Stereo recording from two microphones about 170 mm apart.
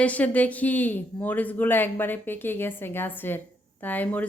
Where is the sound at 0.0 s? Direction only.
10° left (ahead or behind).